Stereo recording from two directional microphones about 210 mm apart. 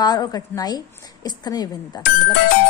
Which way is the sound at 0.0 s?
20° left (ahead or behind).